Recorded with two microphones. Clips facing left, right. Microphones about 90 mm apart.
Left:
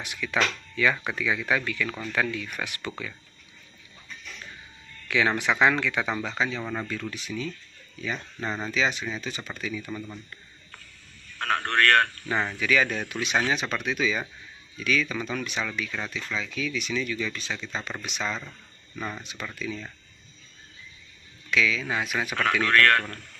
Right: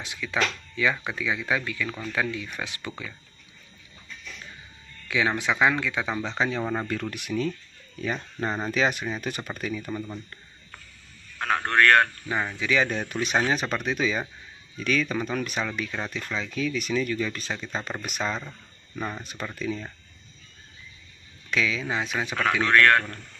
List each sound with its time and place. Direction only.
0.0 s speech: 20° right (ahead or behind)
5.0 s speech: 15° right (ahead or behind)
6.3 s speech: 30° right (ahead or behind)
6.9 s speech: 55° right (ahead or behind)
8.0 s speech: 35° right (ahead or behind)
8.5 s speech: 20° right (ahead or behind)
8.7 s speech: 45° right (ahead or behind)
9.8 s speech: 15° right (ahead or behind)
11.3 s a man's voice: 15° right (ahead or behind)
12.5 s speech: 25° right (ahead or behind); by 18.3 s 45° right (ahead or behind)
18.9 s speech: 15° right (ahead or behind)
19.5 s speech: 40° right (ahead or behind)
21.5 s speech: 35° right (ahead or behind); by 23.2 s 15° right (ahead or behind)